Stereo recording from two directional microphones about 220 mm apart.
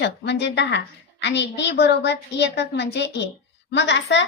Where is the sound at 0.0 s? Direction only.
50° left (ahead or behind).